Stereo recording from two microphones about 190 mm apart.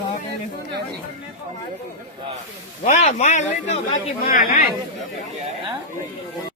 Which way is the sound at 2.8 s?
40° left (ahead or behind).